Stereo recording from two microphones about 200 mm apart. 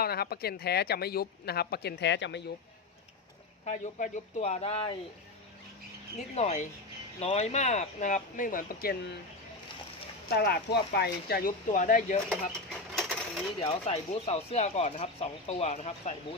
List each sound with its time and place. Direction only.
0.0 s speech: 50° left (ahead or behind)
3.7 s speech: 35° left (ahead or behind)
6.1 s speech: 35° left (ahead or behind)
10.2 s speech: 55° left (ahead or behind)
13.0 s a sound: centre (ahead or behind)
13.6 s speech: 30° left (ahead or behind)